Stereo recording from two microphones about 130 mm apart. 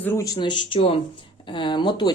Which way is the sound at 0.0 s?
15° left (ahead or behind).